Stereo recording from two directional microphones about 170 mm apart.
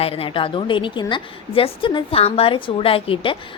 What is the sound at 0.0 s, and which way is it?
A woman's voice, 35° left (ahead or behind).